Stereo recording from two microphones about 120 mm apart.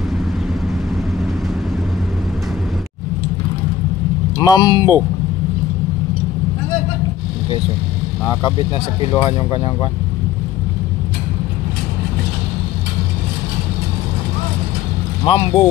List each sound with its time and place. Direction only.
4.4 s speech: 35° left (ahead or behind)
9.1 s speech: 40° left (ahead or behind)
15.2 s speech: 45° left (ahead or behind)